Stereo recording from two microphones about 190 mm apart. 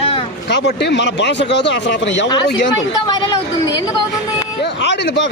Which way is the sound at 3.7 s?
25° left (ahead or behind).